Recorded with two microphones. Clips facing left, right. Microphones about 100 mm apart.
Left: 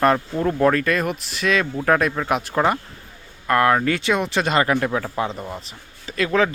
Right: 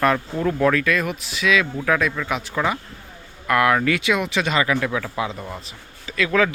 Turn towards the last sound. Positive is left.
turn(degrees=25)  # may be behind; listen again after turning